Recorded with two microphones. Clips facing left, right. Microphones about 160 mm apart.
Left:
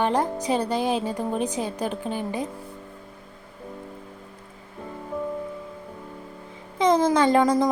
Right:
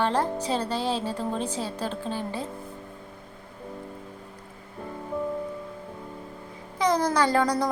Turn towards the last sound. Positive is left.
turn(degrees=20)  # may be behind; listen again after turning